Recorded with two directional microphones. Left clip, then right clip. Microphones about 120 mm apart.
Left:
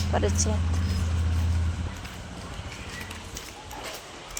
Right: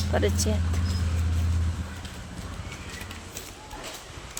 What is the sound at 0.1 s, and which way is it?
Speech, 45° right (ahead or behind).